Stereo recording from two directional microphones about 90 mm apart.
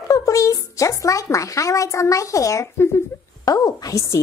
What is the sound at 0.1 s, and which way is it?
Speech, 40° left (ahead or behind).